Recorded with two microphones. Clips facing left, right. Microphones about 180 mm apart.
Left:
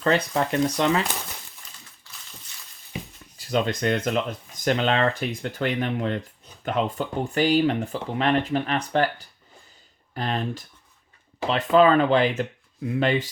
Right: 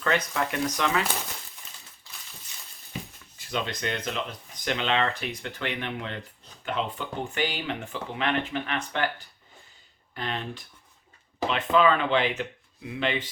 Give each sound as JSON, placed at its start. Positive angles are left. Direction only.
{"t": 0.0, "sound": "speech", "side_deg": 35}
{"t": 3.3, "sound": "speech", "side_deg": 45}
{"t": 10.2, "sound": "speech", "side_deg": 40}